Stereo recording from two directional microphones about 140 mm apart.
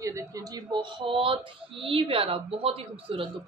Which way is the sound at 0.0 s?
20° right (ahead or behind).